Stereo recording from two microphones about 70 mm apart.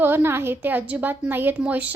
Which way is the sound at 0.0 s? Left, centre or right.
Right.